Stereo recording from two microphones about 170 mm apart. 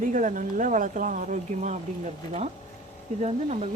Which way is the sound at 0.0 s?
50° right (ahead or behind).